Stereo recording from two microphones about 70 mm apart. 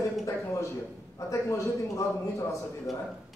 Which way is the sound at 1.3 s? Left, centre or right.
Left.